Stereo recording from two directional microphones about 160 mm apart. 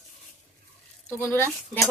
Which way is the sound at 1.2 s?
10° left (ahead or behind).